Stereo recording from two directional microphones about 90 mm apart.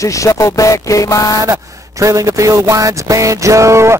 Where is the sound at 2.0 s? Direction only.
35° right (ahead or behind).